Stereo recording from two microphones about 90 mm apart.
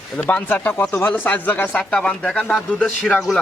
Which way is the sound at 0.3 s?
20° left (ahead or behind).